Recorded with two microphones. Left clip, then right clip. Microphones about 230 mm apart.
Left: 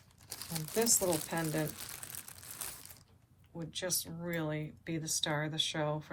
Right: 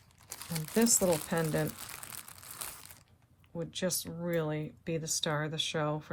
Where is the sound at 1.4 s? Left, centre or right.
Right.